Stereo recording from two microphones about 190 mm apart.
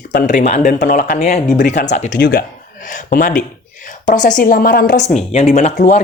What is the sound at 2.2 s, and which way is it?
Speech, 60° left (ahead or behind).